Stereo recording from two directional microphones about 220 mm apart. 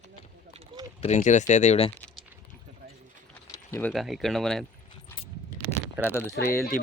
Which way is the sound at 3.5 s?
10° left (ahead or behind).